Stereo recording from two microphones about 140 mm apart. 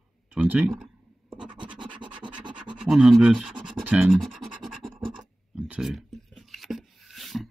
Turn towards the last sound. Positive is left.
turn(degrees=0)  # may be behind; listen again after turning